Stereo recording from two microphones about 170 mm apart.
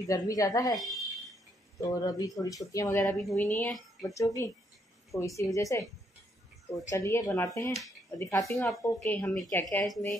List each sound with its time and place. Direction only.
0.1 s speech: 20° left (ahead or behind)
0.7 s a sound: centre (ahead or behind)
1.8 s speech: 20° left (ahead or behind)
3.1 s a woman's voice: centre (ahead or behind)
4.1 s speech: 20° left (ahead or behind)
6.9 s a woman's voice: 20° left (ahead or behind)
8.5 s speech: centre (ahead or behind)
9.5 s a woman's voice: 15° left (ahead or behind)
9.8 s speech: centre (ahead or behind)